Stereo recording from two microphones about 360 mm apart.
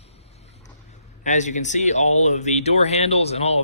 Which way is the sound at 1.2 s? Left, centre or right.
Centre.